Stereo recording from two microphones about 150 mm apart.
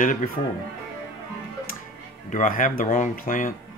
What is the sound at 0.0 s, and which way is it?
Music, 60° left (ahead or behind).